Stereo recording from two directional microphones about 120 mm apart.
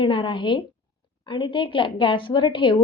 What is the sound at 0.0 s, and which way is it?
A woman's voice, 45° left (ahead or behind).